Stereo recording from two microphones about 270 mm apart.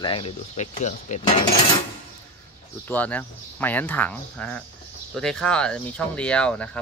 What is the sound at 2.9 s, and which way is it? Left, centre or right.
Speech, centre.